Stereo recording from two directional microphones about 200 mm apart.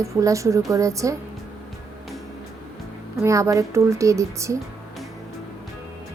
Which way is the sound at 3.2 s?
15° right (ahead or behind).